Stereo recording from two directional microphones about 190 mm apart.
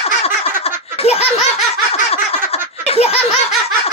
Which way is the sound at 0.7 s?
30° left (ahead or behind).